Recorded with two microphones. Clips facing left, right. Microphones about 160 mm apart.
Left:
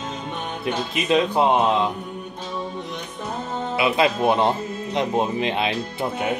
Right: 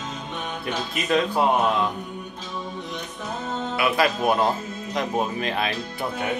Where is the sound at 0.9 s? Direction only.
20° left (ahead or behind).